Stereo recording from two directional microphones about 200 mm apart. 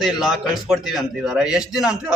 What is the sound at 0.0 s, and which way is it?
A man's voice, centre (ahead or behind).